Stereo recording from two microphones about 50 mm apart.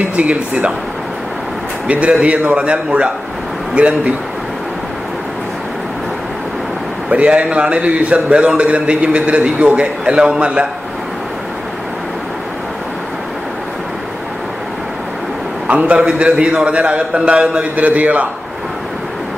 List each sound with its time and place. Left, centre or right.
0.1 s a man's voice: right
1.9 s a man's voice: right
7.1 s a man's voice: right
15.7 s a man's voice: right